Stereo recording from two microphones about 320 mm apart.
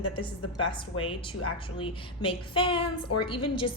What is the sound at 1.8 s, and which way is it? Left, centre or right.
A woman's voice, centre.